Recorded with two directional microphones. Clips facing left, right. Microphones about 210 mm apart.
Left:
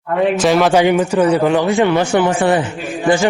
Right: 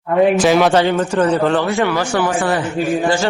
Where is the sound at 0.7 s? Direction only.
15° left (ahead or behind).